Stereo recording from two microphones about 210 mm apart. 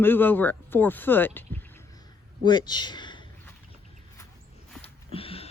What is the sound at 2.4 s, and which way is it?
Speech, 20° left (ahead or behind).